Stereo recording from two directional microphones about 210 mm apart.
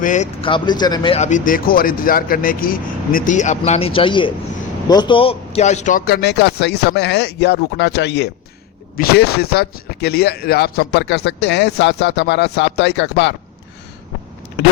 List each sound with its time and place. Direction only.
0.0 s speech: 35° left (ahead or behind)
0.4 s speech: 20° left (ahead or behind); by 13.3 s 55° left (ahead or behind)